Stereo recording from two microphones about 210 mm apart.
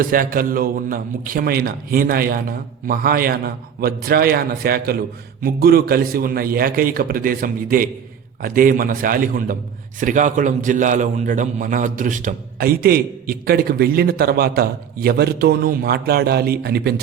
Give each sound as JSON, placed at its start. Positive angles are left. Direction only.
{"t": 0.0, "sound": "a man's voice", "side_deg": -40}